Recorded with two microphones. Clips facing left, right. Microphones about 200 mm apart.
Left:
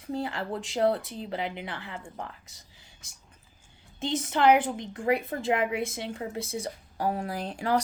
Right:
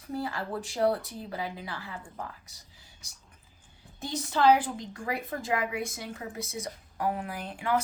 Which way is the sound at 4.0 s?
20° left (ahead or behind).